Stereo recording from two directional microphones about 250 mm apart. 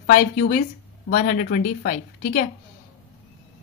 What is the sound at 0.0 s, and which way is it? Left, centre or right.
A woman's voice, left.